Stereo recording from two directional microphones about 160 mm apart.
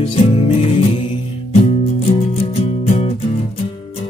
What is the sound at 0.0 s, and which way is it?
Music, 35° left (ahead or behind).